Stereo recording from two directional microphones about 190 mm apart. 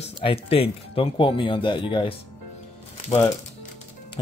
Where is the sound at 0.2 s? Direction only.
30° left (ahead or behind).